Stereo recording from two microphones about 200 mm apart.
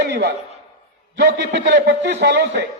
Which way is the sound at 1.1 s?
60° right (ahead or behind).